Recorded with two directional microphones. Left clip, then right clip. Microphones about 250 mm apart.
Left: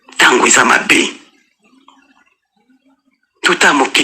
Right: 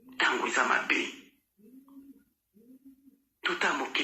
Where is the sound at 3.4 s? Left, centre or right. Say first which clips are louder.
Left 19 dB; left.